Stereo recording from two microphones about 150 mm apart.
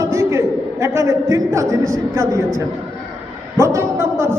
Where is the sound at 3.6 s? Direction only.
20° right (ahead or behind).